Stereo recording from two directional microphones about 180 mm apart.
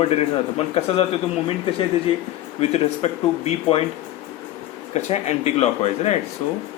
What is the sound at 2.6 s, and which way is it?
Speech, 35° left (ahead or behind).